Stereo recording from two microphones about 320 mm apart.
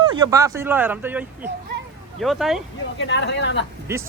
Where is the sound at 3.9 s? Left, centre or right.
Centre.